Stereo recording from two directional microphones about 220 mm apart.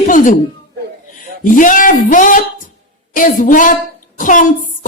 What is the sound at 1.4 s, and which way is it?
A woman's voice, 35° left (ahead or behind).